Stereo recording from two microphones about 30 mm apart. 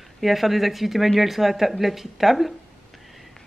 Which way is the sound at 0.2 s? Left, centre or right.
Centre.